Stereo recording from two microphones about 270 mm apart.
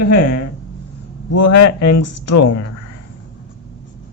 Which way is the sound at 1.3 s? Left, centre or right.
Left.